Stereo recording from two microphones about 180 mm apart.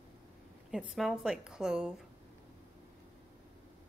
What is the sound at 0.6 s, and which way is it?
A woman's voice, centre (ahead or behind).